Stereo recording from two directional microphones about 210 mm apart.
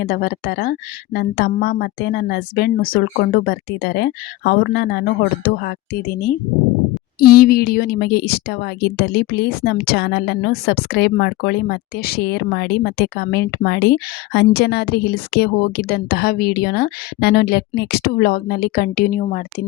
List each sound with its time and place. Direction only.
0.0 s a woman's voice: 45° left (ahead or behind)